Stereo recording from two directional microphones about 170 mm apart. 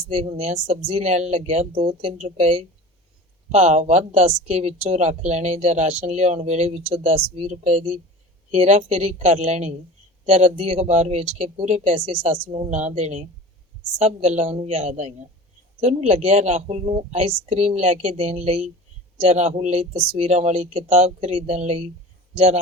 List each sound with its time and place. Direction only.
0.1 s speech: 40° right (ahead or behind)